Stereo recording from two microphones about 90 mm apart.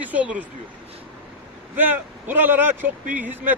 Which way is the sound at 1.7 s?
20° right (ahead or behind).